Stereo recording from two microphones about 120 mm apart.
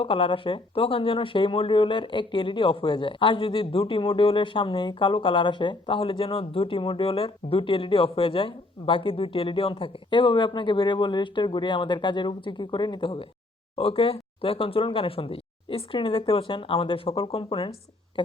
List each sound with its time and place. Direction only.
0.0 s speech: 45° left (ahead or behind)